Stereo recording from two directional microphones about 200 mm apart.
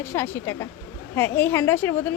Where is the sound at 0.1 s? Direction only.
10° left (ahead or behind).